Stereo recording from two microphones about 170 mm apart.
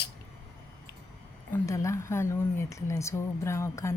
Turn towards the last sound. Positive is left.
turn(degrees=15)  # may be behind; listen again after turning